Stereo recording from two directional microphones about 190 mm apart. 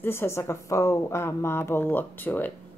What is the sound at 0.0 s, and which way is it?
Speech, 10° left (ahead or behind).